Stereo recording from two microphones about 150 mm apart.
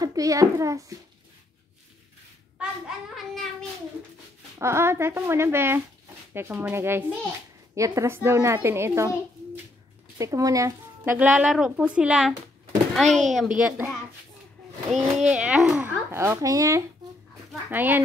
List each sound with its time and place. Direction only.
0.0 s a child's voice: 25° right (ahead or behind)
4.6 s a child's voice: 20° right (ahead or behind)
10.1 s speech: 20° right (ahead or behind)
11.1 s a child's voice: 5° right (ahead or behind)
16.1 s a child's voice: 20° right (ahead or behind)